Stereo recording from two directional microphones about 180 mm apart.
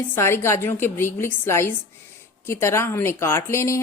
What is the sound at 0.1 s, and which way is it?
A woman's voice, 15° left (ahead or behind).